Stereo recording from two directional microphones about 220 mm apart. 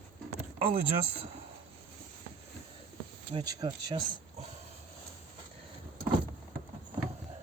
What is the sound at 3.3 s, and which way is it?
Speech, 15° right (ahead or behind).